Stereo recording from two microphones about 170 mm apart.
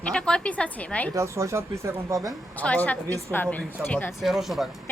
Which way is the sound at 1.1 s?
15° right (ahead or behind).